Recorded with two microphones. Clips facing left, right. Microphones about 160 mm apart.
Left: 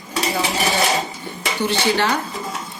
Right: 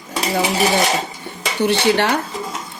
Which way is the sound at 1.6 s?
60° right (ahead or behind).